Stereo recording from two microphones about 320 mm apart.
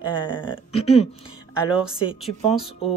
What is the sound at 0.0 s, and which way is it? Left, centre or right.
Speech, centre.